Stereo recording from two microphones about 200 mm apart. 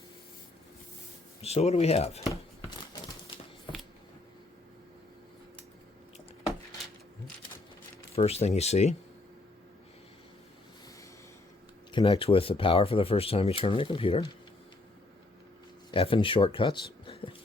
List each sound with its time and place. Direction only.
1.4 s speech: 30° left (ahead or behind)
8.1 s speech: 30° left (ahead or behind)
11.9 s speech: 25° left (ahead or behind)
15.9 s speech: 25° left (ahead or behind)